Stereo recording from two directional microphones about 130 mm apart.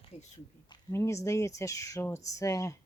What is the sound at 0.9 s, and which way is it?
Speech, 20° left (ahead or behind).